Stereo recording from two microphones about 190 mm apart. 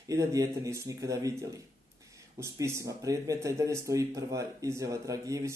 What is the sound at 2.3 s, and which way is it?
Speech, 15° right (ahead or behind).